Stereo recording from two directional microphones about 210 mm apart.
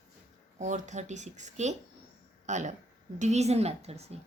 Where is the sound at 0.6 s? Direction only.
35° right (ahead or behind).